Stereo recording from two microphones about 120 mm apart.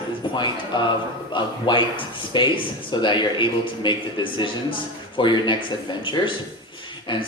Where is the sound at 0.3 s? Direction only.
40° left (ahead or behind).